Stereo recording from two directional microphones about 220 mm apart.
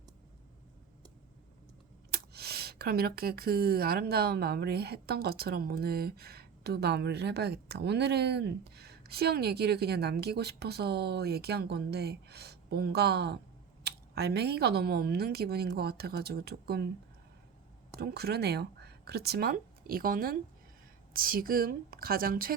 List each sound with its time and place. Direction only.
2.0 s speech: 45° right (ahead or behind)
18.0 s a woman's voice: 45° right (ahead or behind)